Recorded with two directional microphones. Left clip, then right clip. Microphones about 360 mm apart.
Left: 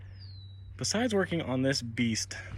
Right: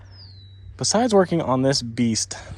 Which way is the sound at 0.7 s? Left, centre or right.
Centre.